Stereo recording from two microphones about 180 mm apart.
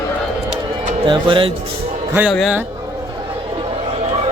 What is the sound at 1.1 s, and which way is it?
Speech, 25° right (ahead or behind).